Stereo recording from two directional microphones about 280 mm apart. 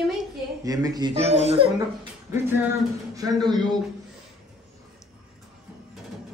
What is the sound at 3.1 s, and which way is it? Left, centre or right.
Speech, centre.